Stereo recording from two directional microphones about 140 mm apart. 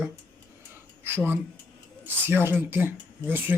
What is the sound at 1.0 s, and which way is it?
Speech, 15° right (ahead or behind).